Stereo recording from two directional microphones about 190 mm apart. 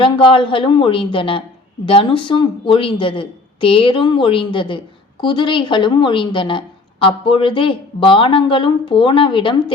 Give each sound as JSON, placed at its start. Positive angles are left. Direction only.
{"t": 0.0, "sound": "a woman's voice", "side_deg": 25}